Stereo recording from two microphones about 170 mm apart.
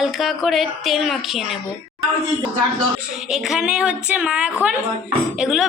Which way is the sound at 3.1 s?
5° right (ahead or behind).